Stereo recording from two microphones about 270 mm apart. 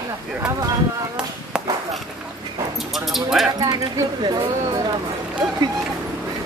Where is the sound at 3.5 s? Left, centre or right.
Centre.